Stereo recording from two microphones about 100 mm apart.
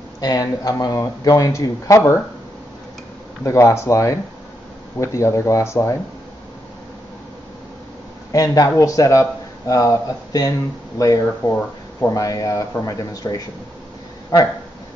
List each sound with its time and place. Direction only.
0.2 s speech: 40° left (ahead or behind)
3.4 s speech: 30° left (ahead or behind)
8.3 s speech: 35° left (ahead or behind)